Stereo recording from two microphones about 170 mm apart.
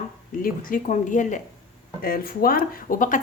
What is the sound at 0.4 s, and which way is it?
Speech, 50° left (ahead or behind).